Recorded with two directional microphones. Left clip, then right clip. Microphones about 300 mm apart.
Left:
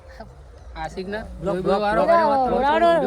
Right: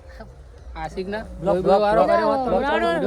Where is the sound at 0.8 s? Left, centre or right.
Right.